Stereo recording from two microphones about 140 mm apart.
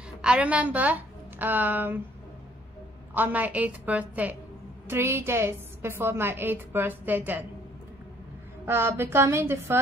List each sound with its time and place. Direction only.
0.2 s a woman's voice: 10° right (ahead or behind)
3.2 s a woman's voice: 10° right (ahead or behind)
8.6 s a woman's voice: 20° right (ahead or behind)